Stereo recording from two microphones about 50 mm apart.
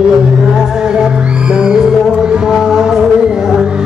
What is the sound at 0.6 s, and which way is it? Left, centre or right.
Music, centre.